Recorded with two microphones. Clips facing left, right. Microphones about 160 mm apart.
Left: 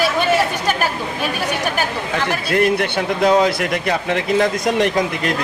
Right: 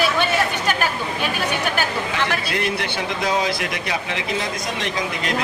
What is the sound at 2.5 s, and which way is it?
Speech, 50° left (ahead or behind).